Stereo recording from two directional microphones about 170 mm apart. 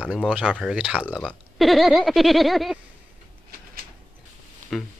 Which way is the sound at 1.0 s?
10° left (ahead or behind).